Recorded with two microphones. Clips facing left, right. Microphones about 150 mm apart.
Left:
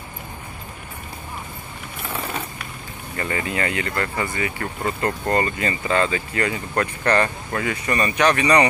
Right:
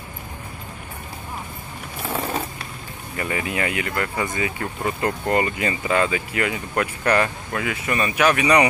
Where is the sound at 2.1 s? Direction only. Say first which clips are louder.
Right 4 dB; 35° right (ahead or behind).